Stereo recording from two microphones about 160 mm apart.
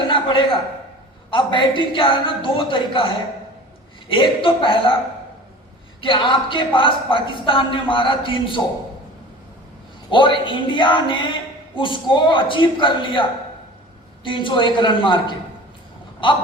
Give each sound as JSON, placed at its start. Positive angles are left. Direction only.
{"t": 0.1, "sound": "a sound", "side_deg": 30}
{"t": 1.3, "sound": "speech", "side_deg": 30}
{"t": 6.0, "sound": "speech", "side_deg": 30}
{"t": 10.1, "sound": "speech", "side_deg": 30}
{"t": 14.3, "sound": "speech", "side_deg": 30}
{"t": 16.2, "sound": "speech", "side_deg": 30}